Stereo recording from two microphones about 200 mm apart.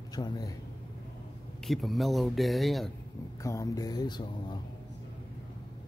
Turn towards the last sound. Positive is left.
turn(degrees=20)  # may be behind; listen again after turning